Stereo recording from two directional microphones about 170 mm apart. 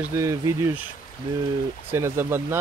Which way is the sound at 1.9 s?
15° right (ahead or behind).